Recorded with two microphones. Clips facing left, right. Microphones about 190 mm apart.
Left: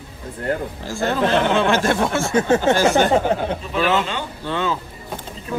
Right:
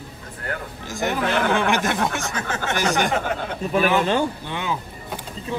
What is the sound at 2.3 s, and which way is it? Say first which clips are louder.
Speech: left 11 dB; 25° left (ahead or behind).